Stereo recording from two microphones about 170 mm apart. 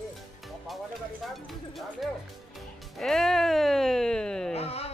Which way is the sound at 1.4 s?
Centre (ahead or behind).